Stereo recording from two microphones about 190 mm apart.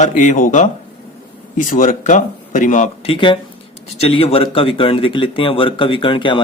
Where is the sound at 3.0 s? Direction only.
25° left (ahead or behind).